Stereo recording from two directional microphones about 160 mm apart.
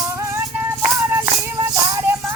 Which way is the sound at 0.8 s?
15° right (ahead or behind).